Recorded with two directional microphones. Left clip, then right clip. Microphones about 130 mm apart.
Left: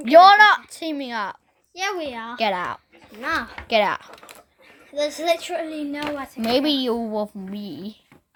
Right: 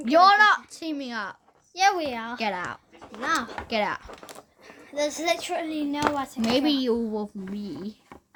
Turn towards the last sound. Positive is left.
turn(degrees=20)  # may be behind; listen again after turning